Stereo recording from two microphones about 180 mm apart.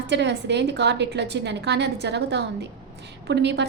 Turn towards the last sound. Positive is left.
turn(degrees=-70)  # may be behind; listen again after turning